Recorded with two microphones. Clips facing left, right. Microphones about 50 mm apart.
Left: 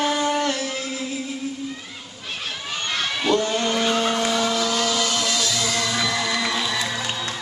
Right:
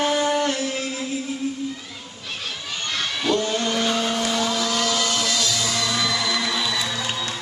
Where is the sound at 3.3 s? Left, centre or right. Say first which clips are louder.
Left 2 dB; left.